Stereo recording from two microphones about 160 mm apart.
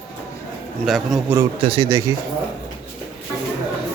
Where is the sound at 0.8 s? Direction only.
Centre (ahead or behind).